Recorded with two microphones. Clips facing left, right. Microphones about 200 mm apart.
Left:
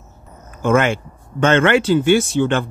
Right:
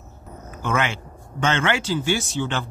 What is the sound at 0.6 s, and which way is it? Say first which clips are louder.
Speech: left 9 dB; 45° left (ahead or behind).